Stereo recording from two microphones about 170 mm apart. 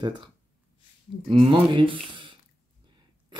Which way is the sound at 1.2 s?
35° right (ahead or behind).